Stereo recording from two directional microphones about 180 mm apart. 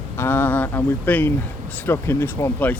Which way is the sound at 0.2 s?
10° left (ahead or behind).